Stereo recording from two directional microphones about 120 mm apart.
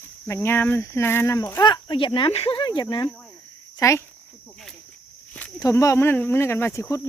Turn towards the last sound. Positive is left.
turn(degrees=25)  # may be behind; listen again after turning